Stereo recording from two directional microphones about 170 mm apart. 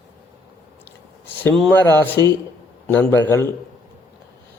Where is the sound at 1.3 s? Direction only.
10° left (ahead or behind).